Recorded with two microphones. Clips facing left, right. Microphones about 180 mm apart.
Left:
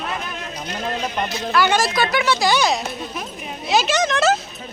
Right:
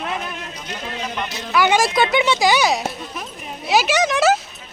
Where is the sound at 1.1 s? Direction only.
40° left (ahead or behind).